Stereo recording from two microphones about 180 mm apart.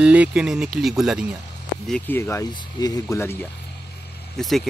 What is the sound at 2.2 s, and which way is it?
Speech, 15° left (ahead or behind).